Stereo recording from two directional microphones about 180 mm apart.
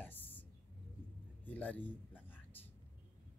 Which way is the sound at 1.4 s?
10° left (ahead or behind).